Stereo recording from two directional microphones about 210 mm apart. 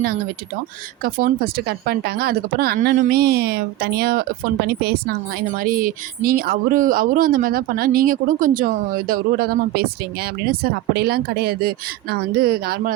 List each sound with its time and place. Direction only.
1.0 s speech: 45° right (ahead or behind)